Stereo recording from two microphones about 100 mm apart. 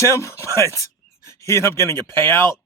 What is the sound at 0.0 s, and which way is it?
Speech, 30° left (ahead or behind).